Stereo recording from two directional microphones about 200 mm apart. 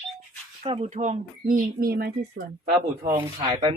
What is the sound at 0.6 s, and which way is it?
Speech, 30° right (ahead or behind).